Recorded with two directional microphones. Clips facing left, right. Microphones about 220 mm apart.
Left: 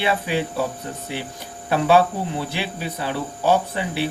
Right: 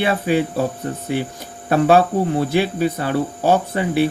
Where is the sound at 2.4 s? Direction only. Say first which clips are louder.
Right 10 dB; 45° right (ahead or behind).